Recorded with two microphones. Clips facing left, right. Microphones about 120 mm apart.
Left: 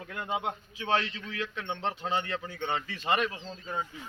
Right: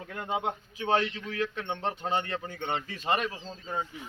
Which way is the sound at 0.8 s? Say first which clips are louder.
Right 3 dB; 45° right (ahead or behind).